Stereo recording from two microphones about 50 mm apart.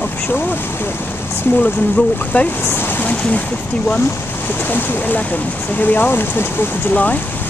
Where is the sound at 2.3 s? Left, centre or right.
Left.